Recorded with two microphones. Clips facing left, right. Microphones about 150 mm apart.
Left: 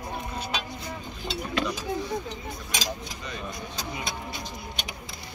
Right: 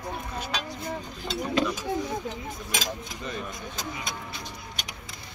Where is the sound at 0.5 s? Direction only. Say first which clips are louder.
Right 1 dB; 45° right (ahead or behind).